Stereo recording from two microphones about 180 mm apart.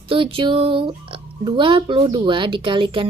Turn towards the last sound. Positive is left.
turn(degrees=-30)  # may be behind; listen again after turning